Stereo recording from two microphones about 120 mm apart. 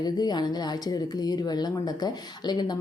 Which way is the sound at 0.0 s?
35° left (ahead or behind).